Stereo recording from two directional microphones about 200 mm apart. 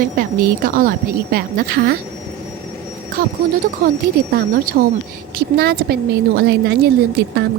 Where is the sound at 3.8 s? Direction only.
45° right (ahead or behind).